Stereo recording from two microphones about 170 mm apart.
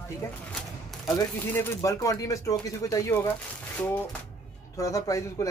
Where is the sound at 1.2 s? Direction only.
15° left (ahead or behind).